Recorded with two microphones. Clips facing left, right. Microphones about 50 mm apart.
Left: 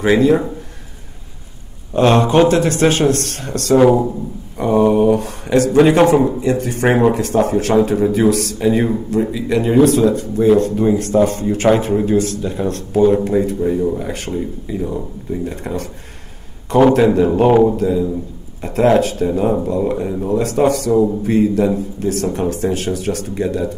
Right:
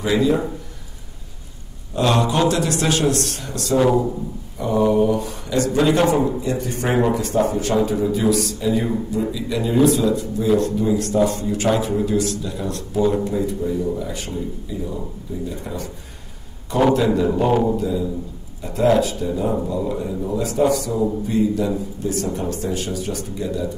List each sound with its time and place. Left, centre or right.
0.0 s a man's voice: left
2.0 s a man's voice: left
11.9 s speech: left
12.2 s a man's voice: left
16.9 s a man's voice: left
17.5 s speech: left
17.7 s a man's voice: left